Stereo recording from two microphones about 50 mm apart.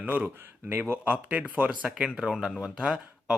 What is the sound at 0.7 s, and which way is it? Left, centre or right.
Speech, right.